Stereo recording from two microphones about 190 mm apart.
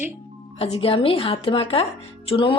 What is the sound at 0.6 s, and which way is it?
Speech, 30° left (ahead or behind).